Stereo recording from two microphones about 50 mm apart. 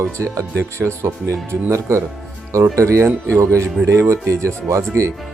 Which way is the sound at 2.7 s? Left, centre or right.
Right.